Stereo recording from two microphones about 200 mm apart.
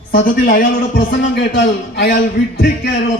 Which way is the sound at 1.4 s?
60° left (ahead or behind).